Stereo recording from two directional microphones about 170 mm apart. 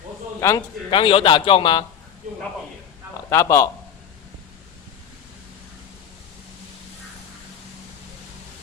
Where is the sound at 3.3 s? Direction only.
15° left (ahead or behind).